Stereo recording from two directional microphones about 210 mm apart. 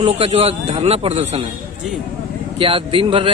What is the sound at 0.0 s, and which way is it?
Speech, 30° right (ahead or behind).